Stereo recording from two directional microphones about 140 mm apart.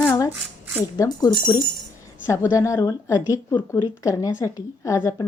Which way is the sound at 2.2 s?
20° left (ahead or behind).